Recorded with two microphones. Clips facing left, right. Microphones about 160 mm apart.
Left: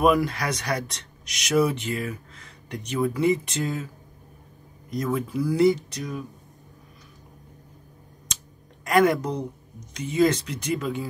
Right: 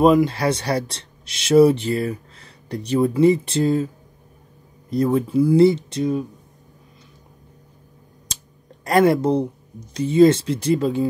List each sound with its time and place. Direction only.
0.0 s speech: 25° right (ahead or behind)
8.3 s clicking: 35° right (ahead or behind)
8.8 s speech: 35° right (ahead or behind)